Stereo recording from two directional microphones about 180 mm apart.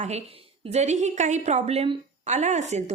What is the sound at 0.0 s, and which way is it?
A woman's voice, 35° right (ahead or behind).